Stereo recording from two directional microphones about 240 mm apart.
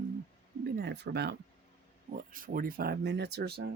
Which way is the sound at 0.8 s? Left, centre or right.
Right.